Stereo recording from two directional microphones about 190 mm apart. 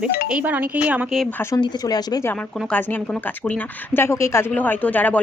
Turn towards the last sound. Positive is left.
turn(degrees=10)  # may be behind; listen again after turning